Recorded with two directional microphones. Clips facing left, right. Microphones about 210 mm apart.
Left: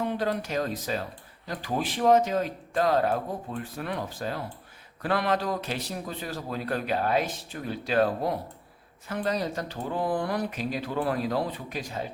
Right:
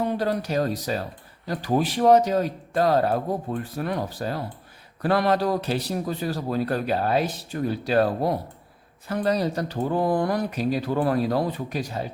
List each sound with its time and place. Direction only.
0.0 s a man's voice: 40° right (ahead or behind)